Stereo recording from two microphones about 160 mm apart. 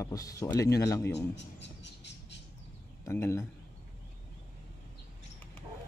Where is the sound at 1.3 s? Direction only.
90° left.